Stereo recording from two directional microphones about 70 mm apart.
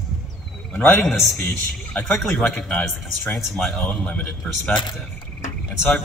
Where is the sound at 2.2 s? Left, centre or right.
Centre.